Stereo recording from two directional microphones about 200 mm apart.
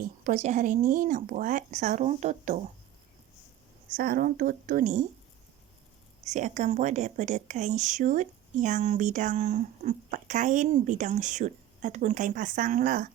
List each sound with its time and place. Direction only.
0.0 s a woman's voice: 40° right (ahead or behind)
3.9 s speech: 45° right (ahead or behind)
6.2 s a woman's voice: 35° right (ahead or behind)